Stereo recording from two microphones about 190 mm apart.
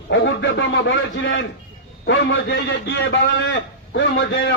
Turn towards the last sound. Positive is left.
turn(degrees=70)  # may be behind; listen again after turning